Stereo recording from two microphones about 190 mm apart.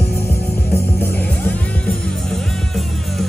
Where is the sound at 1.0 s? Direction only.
10° left (ahead or behind).